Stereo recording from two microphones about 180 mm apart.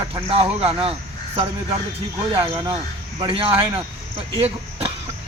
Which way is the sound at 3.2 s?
30° right (ahead or behind).